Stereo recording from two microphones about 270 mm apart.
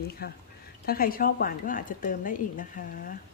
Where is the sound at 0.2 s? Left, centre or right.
Left.